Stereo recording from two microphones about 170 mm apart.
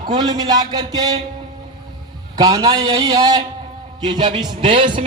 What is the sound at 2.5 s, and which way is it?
A man's voice, 25° right (ahead or behind).